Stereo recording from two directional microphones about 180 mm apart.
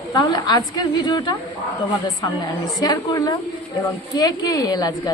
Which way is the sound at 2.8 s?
20° left (ahead or behind).